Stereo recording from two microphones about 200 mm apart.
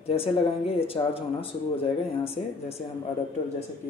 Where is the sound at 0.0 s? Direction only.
30° left (ahead or behind).